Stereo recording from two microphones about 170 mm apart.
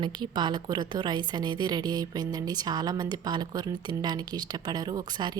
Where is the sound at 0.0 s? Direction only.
25° right (ahead or behind).